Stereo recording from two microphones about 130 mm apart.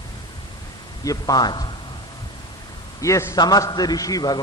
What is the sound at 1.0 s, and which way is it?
Speech, 30° left (ahead or behind).